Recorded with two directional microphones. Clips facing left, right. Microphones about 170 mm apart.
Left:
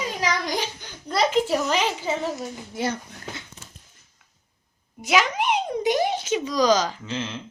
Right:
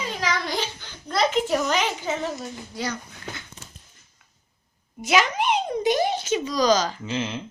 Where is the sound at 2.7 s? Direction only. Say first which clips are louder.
Left 4 dB; 25° left (ahead or behind).